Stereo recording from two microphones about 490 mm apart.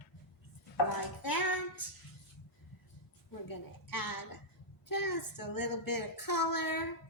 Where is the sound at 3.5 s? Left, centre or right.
Left.